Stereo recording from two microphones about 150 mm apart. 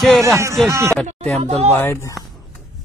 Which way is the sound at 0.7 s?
20° right (ahead or behind).